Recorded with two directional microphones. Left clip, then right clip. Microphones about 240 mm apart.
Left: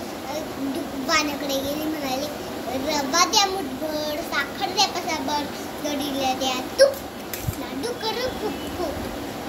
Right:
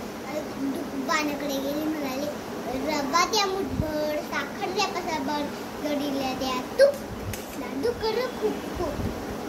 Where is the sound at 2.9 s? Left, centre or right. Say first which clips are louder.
Left 4 dB; centre.